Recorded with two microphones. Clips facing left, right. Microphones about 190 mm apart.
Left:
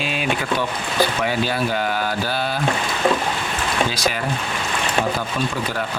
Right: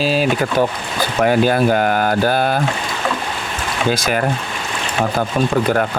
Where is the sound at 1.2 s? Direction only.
50° right (ahead or behind).